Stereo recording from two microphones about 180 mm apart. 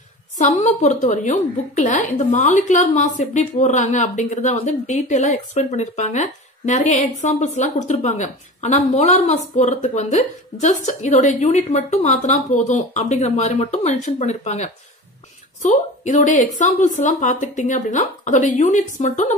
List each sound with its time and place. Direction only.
0.4 s a woman's voice: 40° left (ahead or behind)